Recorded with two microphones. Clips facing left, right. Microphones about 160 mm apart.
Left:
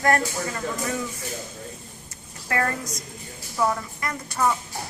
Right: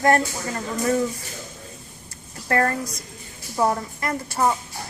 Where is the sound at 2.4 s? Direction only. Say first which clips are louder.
Right 4 dB; 40° right (ahead or behind).